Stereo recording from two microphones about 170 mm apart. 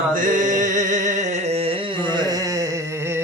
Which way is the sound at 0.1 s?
50° right (ahead or behind).